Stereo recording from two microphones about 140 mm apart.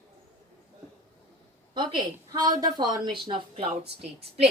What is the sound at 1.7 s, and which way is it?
A woman's voice, 35° right (ahead or behind).